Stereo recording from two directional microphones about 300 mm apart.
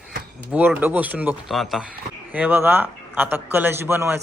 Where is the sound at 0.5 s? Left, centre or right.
Centre.